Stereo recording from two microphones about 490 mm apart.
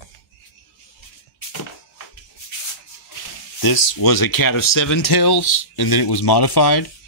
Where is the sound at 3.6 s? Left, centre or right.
Left.